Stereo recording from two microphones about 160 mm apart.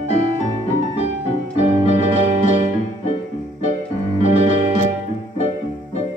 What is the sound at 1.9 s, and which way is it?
Music, 50° left (ahead or behind).